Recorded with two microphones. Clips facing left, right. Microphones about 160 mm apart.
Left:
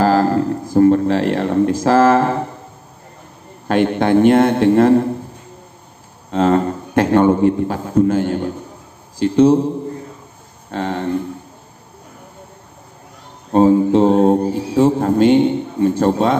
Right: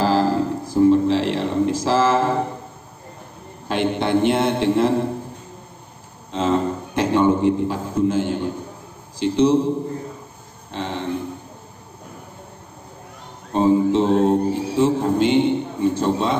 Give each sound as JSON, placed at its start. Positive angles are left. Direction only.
{"t": 0.0, "sound": "a sound", "side_deg": 50}
{"t": 3.6, "sound": "a man's voice", "side_deg": 50}
{"t": 6.3, "sound": "a man's voice", "side_deg": 55}
{"t": 10.7, "sound": "a man's voice", "side_deg": 50}
{"t": 13.5, "sound": "a man's voice", "side_deg": 50}